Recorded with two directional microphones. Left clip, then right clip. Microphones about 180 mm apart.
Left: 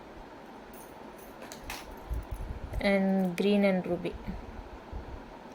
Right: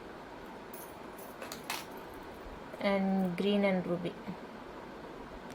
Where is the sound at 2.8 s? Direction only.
40° left (ahead or behind).